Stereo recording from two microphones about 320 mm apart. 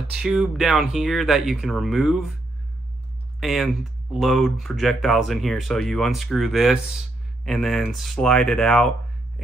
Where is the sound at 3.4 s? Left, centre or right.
Centre.